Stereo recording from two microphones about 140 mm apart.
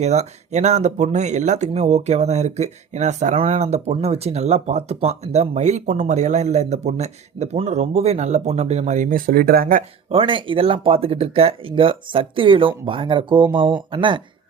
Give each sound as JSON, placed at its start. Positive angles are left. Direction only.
{"t": 0.0, "sound": "speech", "side_deg": -55}
{"t": 10.1, "sound": "speech", "side_deg": -40}